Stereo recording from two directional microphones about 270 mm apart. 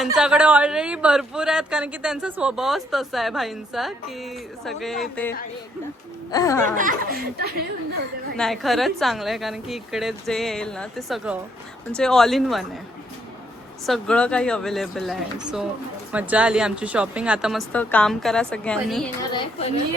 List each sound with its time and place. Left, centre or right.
0.0 s a man's voice: centre
6.3 s speech: centre
6.7 s speech: right
8.4 s a man's voice: centre
13.8 s a man's voice: centre
19.3 s a woman's voice: left